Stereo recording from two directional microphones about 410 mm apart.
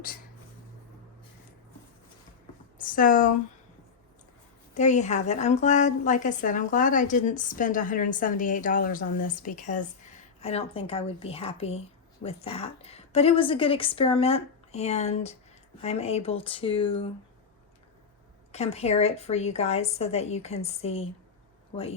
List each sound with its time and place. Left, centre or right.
2.7 s speech: centre
4.7 s a woman's voice: centre
18.5 s a woman's voice: centre